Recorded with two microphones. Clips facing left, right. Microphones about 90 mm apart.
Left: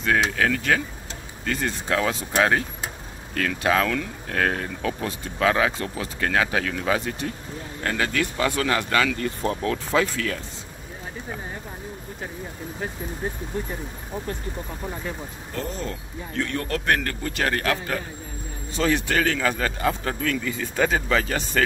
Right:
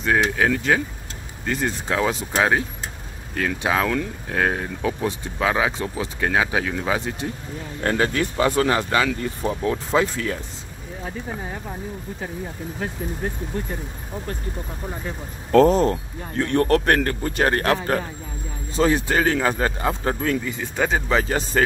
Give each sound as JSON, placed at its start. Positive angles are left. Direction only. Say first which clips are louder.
{"t": 0.0, "sound": "speech", "louder": "right 2 dB", "side_deg": -20}
{"t": 7.8, "sound": "speech", "louder": "right 4 dB", "side_deg": -35}
{"t": 15.5, "sound": "speech", "louder": "right 16 dB", "side_deg": -80}
{"t": 15.9, "sound": "speech", "louder": "right 6 dB", "side_deg": -40}
{"t": 17.0, "sound": "speech", "louder": "right 5 dB", "side_deg": -30}
{"t": 18.8, "sound": "speech", "louder": "right 3 dB", "side_deg": -30}